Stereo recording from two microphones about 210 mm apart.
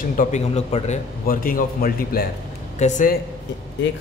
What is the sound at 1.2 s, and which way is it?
Speech, 45° left (ahead or behind).